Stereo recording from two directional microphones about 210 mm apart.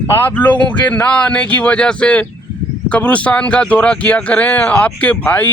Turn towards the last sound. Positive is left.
turn(degrees=10)  # may be behind; listen again after turning